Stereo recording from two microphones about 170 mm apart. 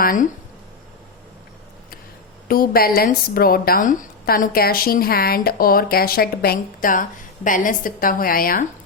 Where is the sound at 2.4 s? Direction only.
60° left (ahead or behind).